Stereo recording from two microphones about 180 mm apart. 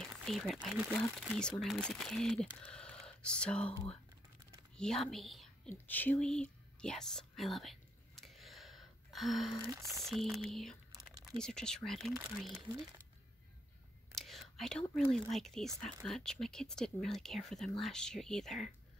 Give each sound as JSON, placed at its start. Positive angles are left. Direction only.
{"t": 0.0, "sound": "speech", "side_deg": 0}
{"t": 4.7, "sound": "speech", "side_deg": 0}
{"t": 8.2, "sound": "a sound", "side_deg": 0}
{"t": 9.8, "sound": "speech", "side_deg": 0}
{"t": 12.6, "sound": "speech", "side_deg": -20}
{"t": 14.1, "sound": "whispering", "side_deg": 0}
{"t": 15.0, "sound": "speech", "side_deg": 0}